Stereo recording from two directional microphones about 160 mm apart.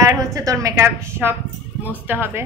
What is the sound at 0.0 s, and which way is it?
A woman's voice, 20° right (ahead or behind).